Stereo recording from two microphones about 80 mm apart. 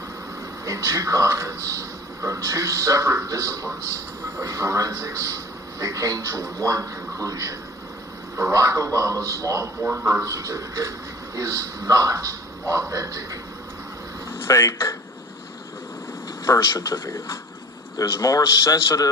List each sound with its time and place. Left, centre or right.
0.6 s a man's voice: right
8.5 s a man's voice: right
14.3 s speech: left
16.5 s a man's voice: left